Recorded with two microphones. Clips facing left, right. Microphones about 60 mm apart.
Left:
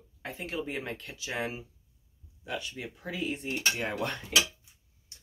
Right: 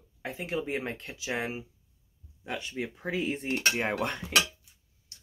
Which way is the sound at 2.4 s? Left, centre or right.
Right.